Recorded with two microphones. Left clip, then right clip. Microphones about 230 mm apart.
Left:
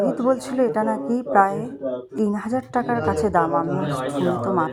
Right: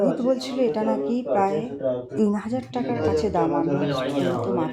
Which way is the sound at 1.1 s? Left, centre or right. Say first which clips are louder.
Left 7 dB; centre.